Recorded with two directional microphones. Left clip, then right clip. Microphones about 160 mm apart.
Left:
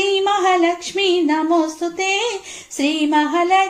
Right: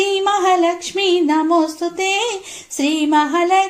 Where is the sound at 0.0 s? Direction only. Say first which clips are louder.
Right 1 dB; 30° right (ahead or behind).